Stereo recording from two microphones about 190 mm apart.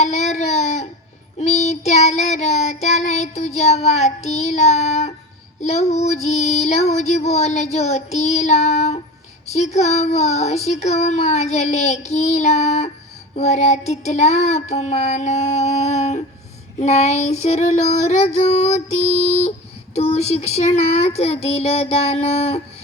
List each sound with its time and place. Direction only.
0.0 s a sound: 35° left (ahead or behind)
1.4 s child singing: 35° left (ahead or behind)
5.5 s speech: 35° left (ahead or behind)